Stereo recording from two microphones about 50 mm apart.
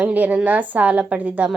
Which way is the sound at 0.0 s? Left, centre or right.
Right.